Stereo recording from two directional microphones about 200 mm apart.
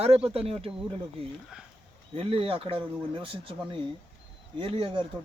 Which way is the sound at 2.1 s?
30° right (ahead or behind).